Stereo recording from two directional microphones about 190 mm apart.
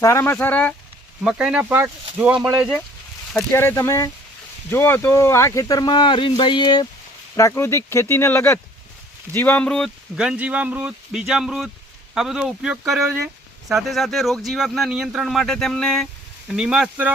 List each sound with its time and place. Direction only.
0.0 s speech: 15° left (ahead or behind)
1.2 s speech: 5° right (ahead or behind)
3.5 s speech: 15° left (ahead or behind); by 17.1 s 5° right (ahead or behind)